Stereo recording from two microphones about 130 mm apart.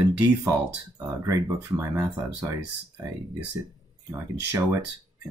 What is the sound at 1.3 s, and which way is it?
Speech, 25° right (ahead or behind).